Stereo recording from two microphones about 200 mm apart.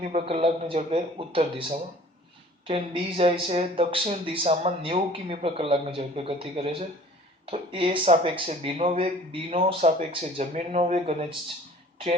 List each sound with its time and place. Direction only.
0.0 s speech: 35° right (ahead or behind)